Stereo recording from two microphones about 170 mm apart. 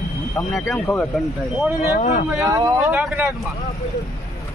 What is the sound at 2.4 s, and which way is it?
Speech, 20° right (ahead or behind).